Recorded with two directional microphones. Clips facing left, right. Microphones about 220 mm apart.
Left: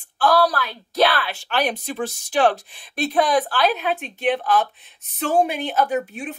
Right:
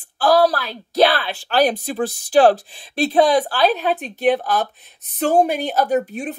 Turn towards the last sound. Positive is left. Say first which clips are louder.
# right 4 dB
turn(degrees=-40)  # may be behind; listen again after turning